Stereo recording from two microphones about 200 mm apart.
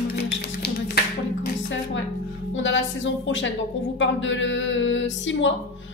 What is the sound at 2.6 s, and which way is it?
A woman's voice, 70° left (ahead or behind).